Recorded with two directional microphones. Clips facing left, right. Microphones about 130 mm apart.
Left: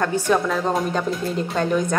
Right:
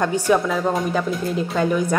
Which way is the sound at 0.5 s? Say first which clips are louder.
Right 1 dB; 5° right (ahead or behind).